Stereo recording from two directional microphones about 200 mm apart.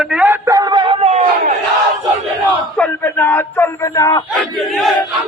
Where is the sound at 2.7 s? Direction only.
10° left (ahead or behind).